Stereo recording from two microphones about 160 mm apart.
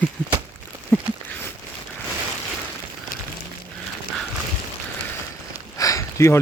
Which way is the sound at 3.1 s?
60° left (ahead or behind).